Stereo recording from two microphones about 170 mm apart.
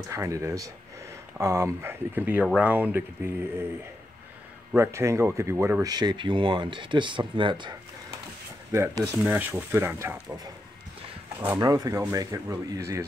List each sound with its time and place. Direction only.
0.1 s speech: 15° right (ahead or behind)
4.7 s speech: 15° right (ahead or behind)
8.7 s speech: 15° right (ahead or behind)